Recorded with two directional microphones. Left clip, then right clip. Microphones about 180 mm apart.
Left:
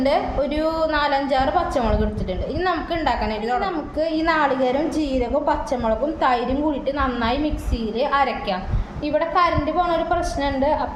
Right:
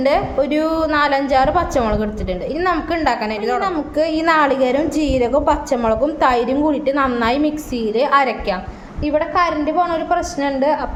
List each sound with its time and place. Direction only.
0.0 s a woman's voice: 35° right (ahead or behind)